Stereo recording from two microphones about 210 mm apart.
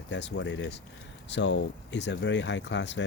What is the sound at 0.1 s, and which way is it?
Speech, 55° left (ahead or behind).